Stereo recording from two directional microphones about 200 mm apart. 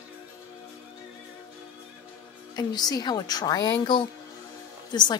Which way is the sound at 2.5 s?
20° left (ahead or behind).